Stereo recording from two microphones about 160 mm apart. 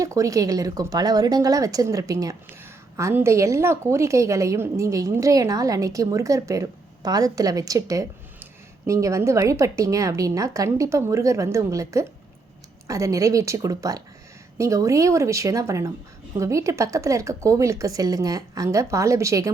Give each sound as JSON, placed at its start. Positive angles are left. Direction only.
{"t": 0.0, "sound": "a woman's voice", "side_deg": -20}